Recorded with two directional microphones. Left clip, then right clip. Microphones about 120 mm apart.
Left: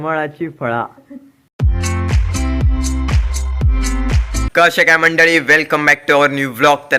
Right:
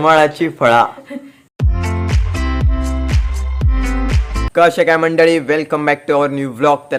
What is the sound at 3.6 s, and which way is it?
Speech, centre (ahead or behind).